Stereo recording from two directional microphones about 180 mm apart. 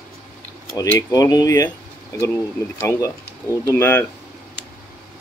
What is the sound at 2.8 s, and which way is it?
Speech, 15° left (ahead or behind).